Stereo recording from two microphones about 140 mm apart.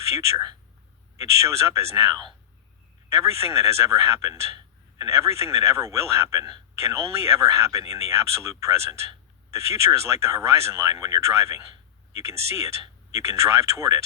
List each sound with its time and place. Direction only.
1.2 s speech: 20° right (ahead or behind)
3.2 s speech: 20° right (ahead or behind)